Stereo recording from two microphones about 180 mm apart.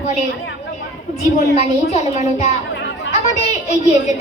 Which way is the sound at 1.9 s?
35° left (ahead or behind).